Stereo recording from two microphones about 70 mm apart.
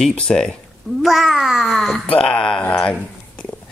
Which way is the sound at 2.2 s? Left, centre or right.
Centre.